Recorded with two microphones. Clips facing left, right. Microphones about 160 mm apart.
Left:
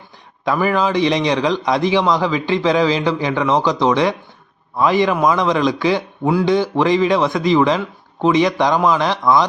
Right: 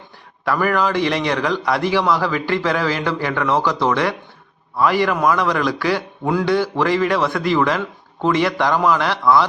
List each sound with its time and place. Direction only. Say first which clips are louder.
0.4 s a man's voice: left 1 dB; 15° left (ahead or behind)